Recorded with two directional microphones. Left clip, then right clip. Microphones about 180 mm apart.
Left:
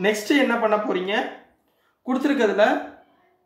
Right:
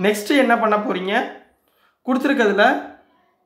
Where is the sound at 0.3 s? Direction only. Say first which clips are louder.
Right 4 dB; 40° right (ahead or behind).